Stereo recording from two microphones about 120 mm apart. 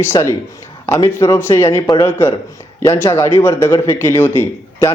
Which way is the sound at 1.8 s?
35° left (ahead or behind).